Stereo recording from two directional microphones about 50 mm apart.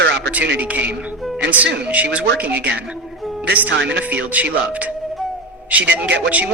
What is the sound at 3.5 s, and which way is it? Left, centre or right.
Music, right.